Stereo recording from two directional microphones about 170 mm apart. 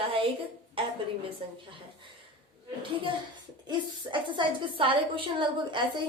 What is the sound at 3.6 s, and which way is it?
A woman's voice, 25° right (ahead or behind).